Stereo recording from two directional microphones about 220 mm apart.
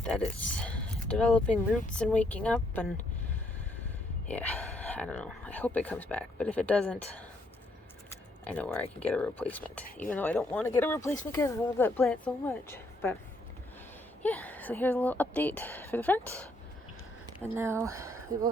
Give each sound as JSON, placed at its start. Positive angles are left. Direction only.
{"t": 0.0, "sound": "speech", "side_deg": 5}
{"t": 4.3, "sound": "speech", "side_deg": 5}
{"t": 8.4, "sound": "speech", "side_deg": 5}
{"t": 14.2, "sound": "speech", "side_deg": 5}
{"t": 17.5, "sound": "speech", "side_deg": -10}